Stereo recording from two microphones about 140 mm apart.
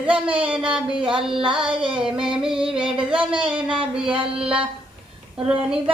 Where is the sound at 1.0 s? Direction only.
35° right (ahead or behind).